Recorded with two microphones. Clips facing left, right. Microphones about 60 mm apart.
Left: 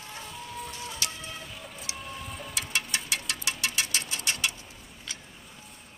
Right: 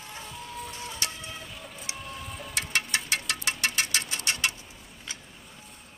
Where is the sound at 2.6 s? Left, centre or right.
Right.